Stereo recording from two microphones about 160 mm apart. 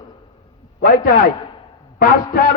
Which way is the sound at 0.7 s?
60° left (ahead or behind).